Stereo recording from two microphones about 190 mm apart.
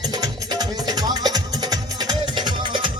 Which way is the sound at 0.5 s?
20° right (ahead or behind).